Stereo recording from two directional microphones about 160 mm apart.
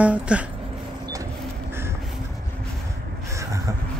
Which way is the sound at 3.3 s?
20° right (ahead or behind).